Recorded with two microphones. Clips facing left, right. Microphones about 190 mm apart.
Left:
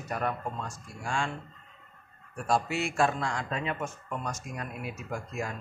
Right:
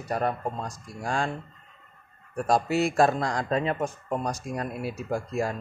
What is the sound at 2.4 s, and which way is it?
Speech, 40° right (ahead or behind).